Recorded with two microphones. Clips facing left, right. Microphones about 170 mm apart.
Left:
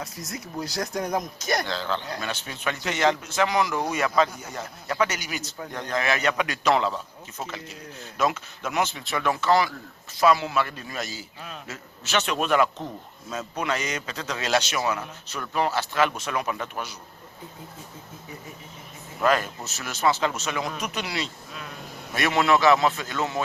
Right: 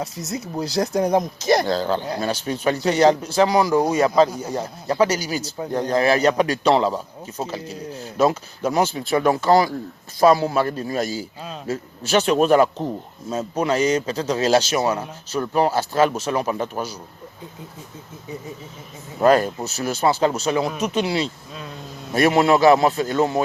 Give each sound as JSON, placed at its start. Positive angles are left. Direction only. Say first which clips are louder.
{"t": 0.2, "sound": "speech", "louder": "right 6 dB", "side_deg": -20}
{"t": 1.7, "sound": "speech", "louder": "right 8 dB", "side_deg": -40}
{"t": 19.2, "sound": "speech", "louder": "right 7 dB", "side_deg": -35}